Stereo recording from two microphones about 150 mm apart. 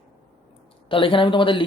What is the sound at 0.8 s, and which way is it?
Speech, 35° left (ahead or behind).